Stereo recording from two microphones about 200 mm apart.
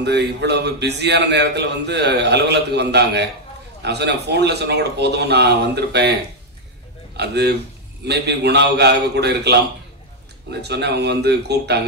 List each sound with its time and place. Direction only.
0.0 s a man's voice: 55° right (ahead or behind)
7.2 s a man's voice: 55° right (ahead or behind)